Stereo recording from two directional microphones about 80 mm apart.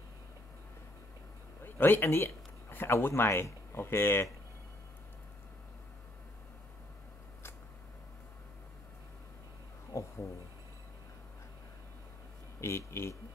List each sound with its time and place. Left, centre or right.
1.6 s speech: left
9.9 s a sound: left
12.5 s speech: left